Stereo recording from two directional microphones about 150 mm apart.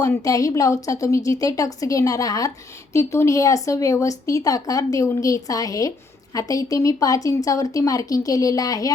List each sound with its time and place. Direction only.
0.0 s speech: 25° left (ahead or behind)